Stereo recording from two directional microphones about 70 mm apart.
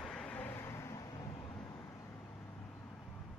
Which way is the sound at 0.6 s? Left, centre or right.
Left.